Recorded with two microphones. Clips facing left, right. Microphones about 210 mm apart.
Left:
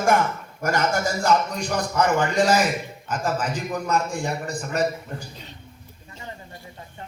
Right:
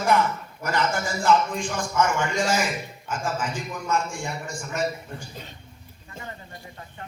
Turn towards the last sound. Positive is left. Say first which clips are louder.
# left 3 dB
turn(degrees=35)  # may be behind; listen again after turning